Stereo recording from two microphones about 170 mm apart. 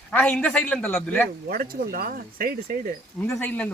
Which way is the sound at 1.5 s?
60° right (ahead or behind).